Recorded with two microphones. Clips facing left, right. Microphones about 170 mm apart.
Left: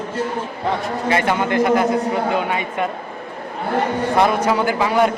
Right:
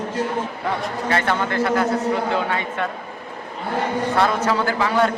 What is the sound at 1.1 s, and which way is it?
A man's voice, 15° left (ahead or behind).